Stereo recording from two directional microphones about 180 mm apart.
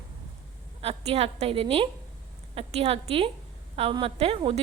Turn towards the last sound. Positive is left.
turn(degrees=-30)  # may be behind; listen again after turning